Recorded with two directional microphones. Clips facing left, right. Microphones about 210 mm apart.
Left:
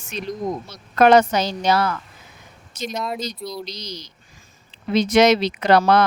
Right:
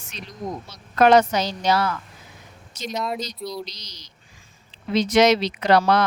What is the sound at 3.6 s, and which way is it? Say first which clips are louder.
Speech: left 10 dB; 55° left (ahead or behind).